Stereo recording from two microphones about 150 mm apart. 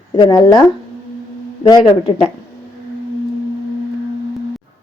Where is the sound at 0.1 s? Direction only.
30° left (ahead or behind).